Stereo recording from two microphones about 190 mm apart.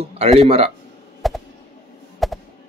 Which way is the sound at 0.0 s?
30° right (ahead or behind).